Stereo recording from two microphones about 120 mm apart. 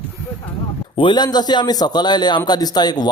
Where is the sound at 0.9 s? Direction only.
40° left (ahead or behind).